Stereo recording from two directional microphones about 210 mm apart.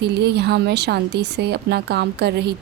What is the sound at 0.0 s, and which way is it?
Speech, 50° right (ahead or behind).